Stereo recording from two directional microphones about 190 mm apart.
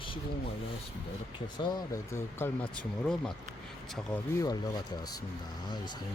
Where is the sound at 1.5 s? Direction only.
20° left (ahead or behind); by 4.2 s centre (ahead or behind).